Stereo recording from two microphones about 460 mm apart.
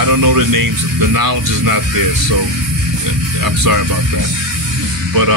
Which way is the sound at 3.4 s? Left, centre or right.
Right.